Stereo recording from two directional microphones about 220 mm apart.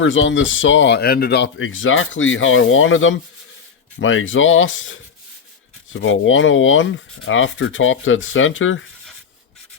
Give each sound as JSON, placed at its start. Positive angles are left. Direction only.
{"t": 0.0, "sound": "speech", "side_deg": 60}